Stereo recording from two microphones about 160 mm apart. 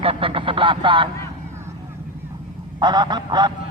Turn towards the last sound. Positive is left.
turn(degrees=-30)  # may be behind; listen again after turning